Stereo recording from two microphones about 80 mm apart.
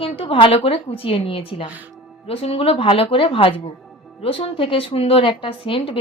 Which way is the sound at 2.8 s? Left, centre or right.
Left.